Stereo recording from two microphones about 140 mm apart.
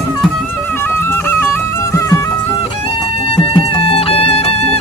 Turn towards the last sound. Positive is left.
turn(degrees=45)  # may be behind; listen again after turning